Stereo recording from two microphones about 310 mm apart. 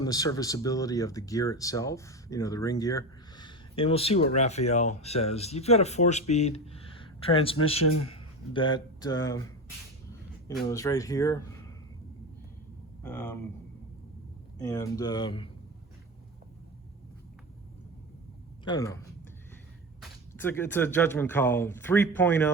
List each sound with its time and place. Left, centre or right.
0.0 s speech: centre
10.7 s speech: centre
13.0 s speech: centre
14.6 s speech: centre
18.6 s speech: centre
20.0 s speech: centre